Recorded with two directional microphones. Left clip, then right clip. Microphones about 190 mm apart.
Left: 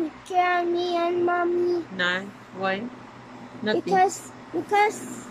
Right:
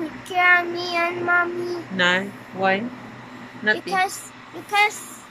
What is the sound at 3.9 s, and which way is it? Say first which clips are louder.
Speech: left 2 dB; 35° left (ahead or behind).